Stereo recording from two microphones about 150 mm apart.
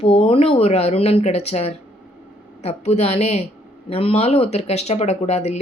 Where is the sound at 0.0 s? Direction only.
40° left (ahead or behind).